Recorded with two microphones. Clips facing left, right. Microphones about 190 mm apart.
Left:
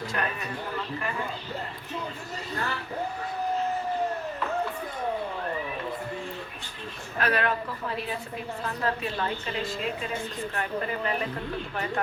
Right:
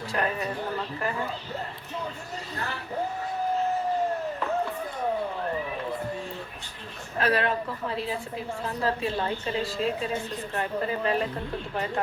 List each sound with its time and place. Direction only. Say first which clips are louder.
0.1 s a man's voice: right 6 dB; 30° right (ahead or behind)
7.2 s a woman's voice: right 2 dB; 30° right (ahead or behind)